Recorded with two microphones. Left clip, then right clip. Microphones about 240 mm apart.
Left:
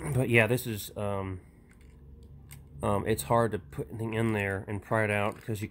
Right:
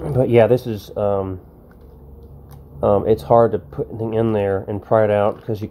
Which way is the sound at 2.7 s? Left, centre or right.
Left.